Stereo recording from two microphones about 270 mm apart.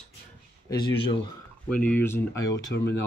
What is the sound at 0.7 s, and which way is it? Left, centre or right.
Speech, centre.